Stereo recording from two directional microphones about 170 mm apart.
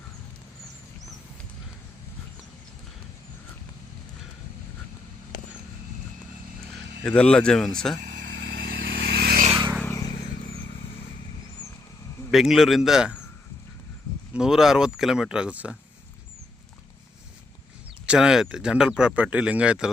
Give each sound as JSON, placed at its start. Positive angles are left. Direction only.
{"t": 7.0, "sound": "speech", "side_deg": 5}
{"t": 8.0, "sound": "vehicle", "side_deg": -55}
{"t": 9.5, "sound": "vehicle", "side_deg": -25}
{"t": 9.8, "sound": "vehicle", "side_deg": 20}
{"t": 12.3, "sound": "speech", "side_deg": 0}
{"t": 14.3, "sound": "speech", "side_deg": -5}
{"t": 18.0, "sound": "speech", "side_deg": -5}